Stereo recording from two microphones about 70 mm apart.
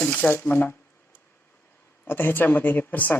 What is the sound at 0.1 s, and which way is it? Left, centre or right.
Speech, left.